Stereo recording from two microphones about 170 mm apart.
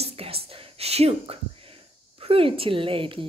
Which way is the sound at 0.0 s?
35° right (ahead or behind).